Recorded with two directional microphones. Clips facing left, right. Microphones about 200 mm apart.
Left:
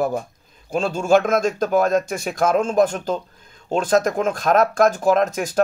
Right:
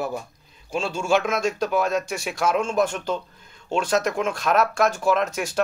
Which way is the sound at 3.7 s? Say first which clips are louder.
Left 4 dB; 50° left (ahead or behind).